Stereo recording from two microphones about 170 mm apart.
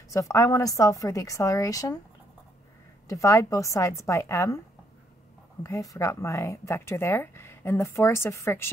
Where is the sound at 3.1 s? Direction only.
20° left (ahead or behind).